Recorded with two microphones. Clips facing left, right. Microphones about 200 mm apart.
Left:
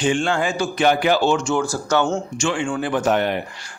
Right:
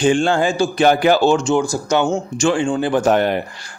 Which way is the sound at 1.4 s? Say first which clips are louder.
Right 4 dB; 15° right (ahead or behind).